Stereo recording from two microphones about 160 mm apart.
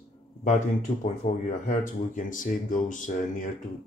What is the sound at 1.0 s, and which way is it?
Speech, 50° left (ahead or behind).